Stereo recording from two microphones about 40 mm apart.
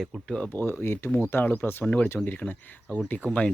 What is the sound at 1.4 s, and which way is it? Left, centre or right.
Speech, left.